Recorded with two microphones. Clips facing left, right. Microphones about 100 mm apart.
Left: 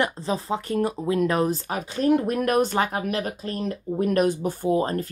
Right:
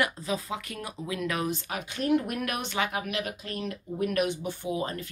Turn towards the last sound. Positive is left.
turn(degrees=40)  # may be behind; listen again after turning